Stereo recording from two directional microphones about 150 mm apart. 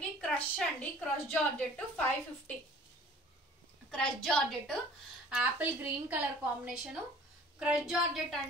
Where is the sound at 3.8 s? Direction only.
5° left (ahead or behind).